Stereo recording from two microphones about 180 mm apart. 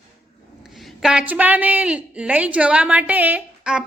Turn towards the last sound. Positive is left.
turn(degrees=-5)  # may be behind; listen again after turning